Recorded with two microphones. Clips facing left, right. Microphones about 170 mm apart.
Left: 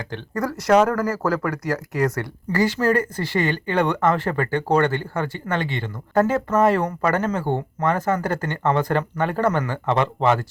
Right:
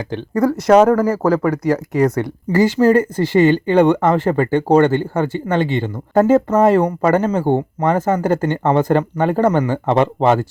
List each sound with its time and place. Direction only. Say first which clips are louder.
0.1 s speech: right 10 dB; 20° right (ahead or behind)
10.2 s speech: right 5 dB; 35° right (ahead or behind)